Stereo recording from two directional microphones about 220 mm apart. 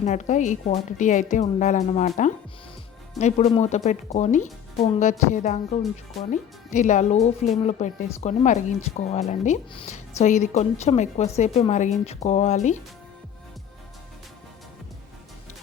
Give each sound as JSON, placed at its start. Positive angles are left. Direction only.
{"t": 0.0, "sound": "a woman's voice", "side_deg": 30}